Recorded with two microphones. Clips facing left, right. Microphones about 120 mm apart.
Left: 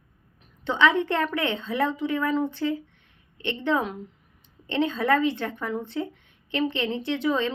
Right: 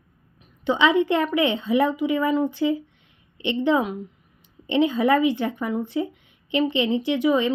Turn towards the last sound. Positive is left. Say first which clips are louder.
# right 5 dB
turn(degrees=-15)  # may be behind; listen again after turning